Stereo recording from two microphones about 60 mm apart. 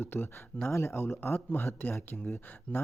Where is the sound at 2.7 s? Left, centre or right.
Left.